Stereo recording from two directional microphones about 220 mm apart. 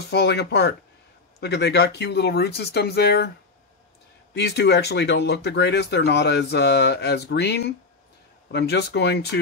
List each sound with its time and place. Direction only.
0.1 s speech: 50° left (ahead or behind)
4.4 s speech: 50° left (ahead or behind)